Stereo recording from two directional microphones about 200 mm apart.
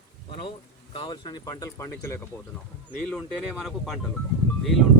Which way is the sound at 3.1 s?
Centre (ahead or behind).